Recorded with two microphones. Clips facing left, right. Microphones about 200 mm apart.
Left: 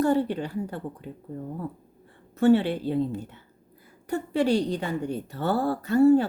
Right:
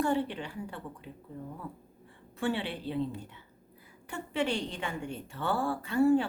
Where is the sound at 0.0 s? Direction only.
40° left (ahead or behind).